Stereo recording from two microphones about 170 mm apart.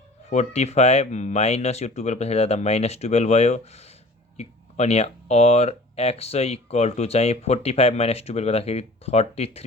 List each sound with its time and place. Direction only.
0.3 s speech: 40° left (ahead or behind)